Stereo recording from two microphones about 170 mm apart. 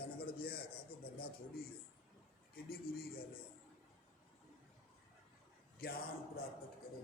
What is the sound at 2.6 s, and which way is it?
Speech, 60° left (ahead or behind).